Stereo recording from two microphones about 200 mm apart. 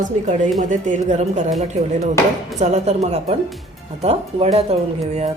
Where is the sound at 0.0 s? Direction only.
40° right (ahead or behind).